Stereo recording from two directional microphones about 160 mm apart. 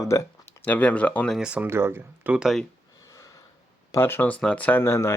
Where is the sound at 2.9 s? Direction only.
20° left (ahead or behind).